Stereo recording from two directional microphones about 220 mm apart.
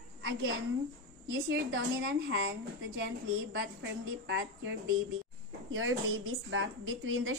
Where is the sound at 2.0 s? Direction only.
55° right (ahead or behind).